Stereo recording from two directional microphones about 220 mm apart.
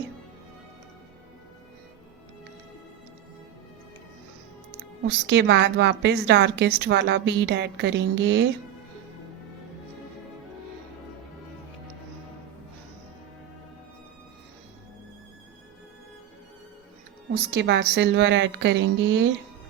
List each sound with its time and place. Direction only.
5.0 s a woman's voice: 55° right (ahead or behind)
17.5 s a woman's voice: 50° right (ahead or behind)